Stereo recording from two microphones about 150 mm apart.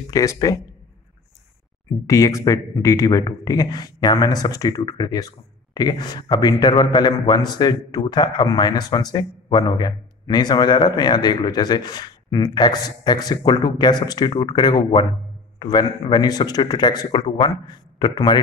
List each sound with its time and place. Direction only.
0.1 s a man's voice: 20° left (ahead or behind)
2.0 s a man's voice: 20° left (ahead or behind)